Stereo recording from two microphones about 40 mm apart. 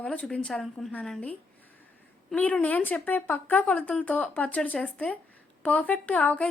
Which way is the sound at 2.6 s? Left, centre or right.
Left.